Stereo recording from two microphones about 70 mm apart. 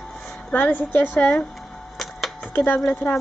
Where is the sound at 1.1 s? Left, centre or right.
Centre.